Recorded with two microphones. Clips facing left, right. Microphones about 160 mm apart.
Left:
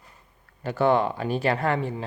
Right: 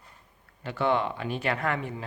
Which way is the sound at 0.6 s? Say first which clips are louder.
Left 5 dB; 40° left (ahead or behind).